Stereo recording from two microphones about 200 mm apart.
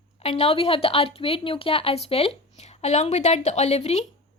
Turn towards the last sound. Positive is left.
turn(degrees=35)  # may be behind; listen again after turning